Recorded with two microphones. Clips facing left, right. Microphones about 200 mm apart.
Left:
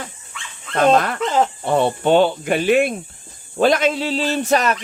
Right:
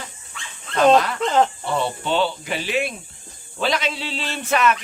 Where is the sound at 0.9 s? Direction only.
50° left (ahead or behind).